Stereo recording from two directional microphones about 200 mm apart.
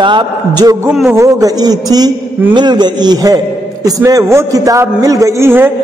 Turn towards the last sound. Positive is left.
turn(degrees=-10)  # may be behind; listen again after turning